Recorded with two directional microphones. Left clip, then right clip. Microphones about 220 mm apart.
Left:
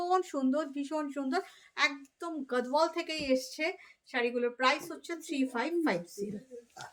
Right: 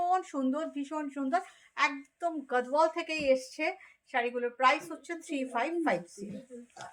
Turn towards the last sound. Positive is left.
turn(degrees=15)  # may be behind; listen again after turning